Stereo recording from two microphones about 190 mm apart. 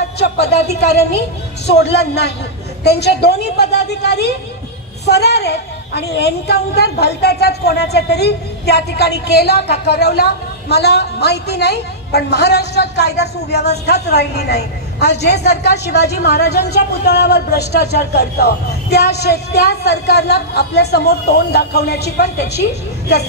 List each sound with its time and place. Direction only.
0.2 s a woman's voice: 60° left (ahead or behind)